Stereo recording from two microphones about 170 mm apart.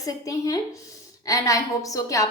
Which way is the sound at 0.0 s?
20° left (ahead or behind).